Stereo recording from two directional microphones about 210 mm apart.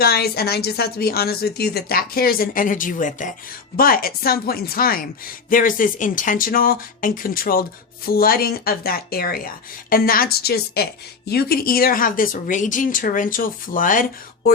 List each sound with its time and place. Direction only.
0.0 s speech: 50° left (ahead or behind)